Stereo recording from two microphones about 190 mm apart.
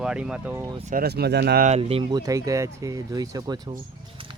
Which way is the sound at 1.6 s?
35° right (ahead or behind).